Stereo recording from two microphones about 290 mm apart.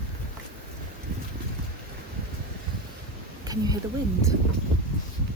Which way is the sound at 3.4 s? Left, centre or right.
Centre.